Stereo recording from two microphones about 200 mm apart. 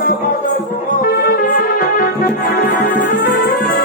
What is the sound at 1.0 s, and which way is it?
Music, 45° left (ahead or behind).